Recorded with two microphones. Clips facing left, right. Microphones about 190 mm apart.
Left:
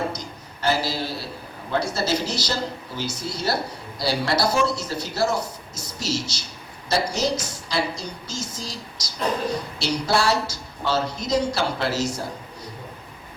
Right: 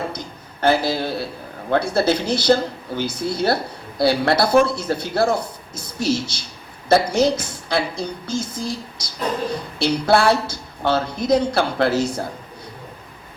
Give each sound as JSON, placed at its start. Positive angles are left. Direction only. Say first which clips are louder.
{"t": 0.6, "sound": "speech", "louder": "right 5 dB", "side_deg": -55}